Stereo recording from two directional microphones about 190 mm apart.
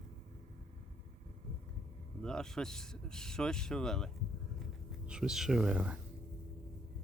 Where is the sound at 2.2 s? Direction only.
5° left (ahead or behind).